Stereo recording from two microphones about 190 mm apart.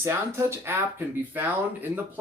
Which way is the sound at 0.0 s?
15° right (ahead or behind).